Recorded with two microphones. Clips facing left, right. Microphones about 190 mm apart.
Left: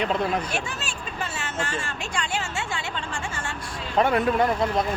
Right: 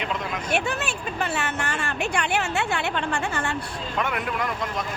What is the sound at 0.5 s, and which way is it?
Vehicle, 60° right (ahead or behind).